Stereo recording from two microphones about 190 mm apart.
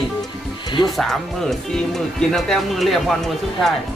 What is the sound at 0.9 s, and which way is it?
Speech, centre (ahead or behind).